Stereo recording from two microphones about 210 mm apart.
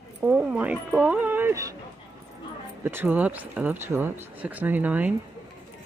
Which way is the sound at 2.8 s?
10° right (ahead or behind).